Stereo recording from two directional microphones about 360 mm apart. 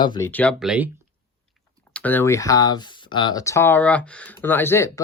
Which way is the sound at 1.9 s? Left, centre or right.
Centre.